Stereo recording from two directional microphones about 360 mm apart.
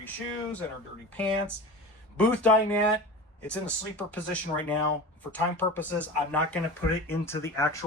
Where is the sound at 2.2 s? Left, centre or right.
Centre.